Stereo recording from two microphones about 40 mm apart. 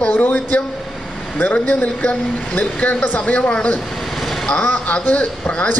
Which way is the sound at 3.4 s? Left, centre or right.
Left.